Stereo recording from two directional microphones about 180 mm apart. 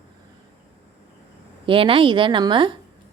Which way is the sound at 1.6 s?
30° right (ahead or behind).